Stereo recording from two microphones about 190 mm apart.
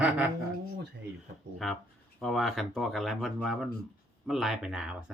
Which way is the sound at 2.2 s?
Centre (ahead or behind).